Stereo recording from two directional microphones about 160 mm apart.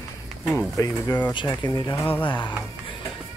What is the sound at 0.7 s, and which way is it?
Speech, 20° left (ahead or behind).